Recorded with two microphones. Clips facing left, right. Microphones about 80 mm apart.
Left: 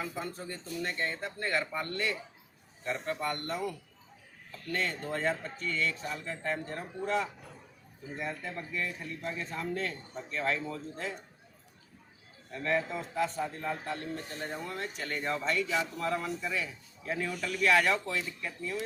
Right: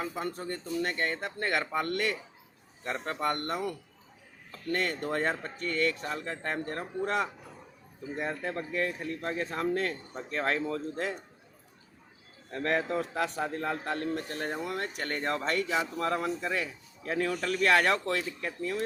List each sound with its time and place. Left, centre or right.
0.0 s a man's voice: right
2.8 s a man's voice: right
8.4 s a man's voice: right
12.5 s a man's voice: right